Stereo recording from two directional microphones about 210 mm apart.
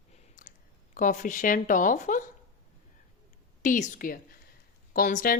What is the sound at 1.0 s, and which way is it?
A woman's voice, 40° left (ahead or behind).